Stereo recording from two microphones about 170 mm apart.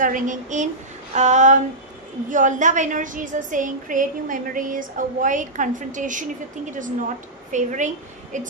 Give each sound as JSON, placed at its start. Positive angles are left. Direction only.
{"t": 0.0, "sound": "a woman's voice", "side_deg": -50}